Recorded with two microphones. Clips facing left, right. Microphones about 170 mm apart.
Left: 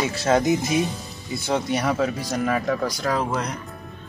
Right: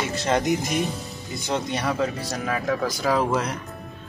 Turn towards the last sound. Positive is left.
turn(degrees=-5)  # may be behind; listen again after turning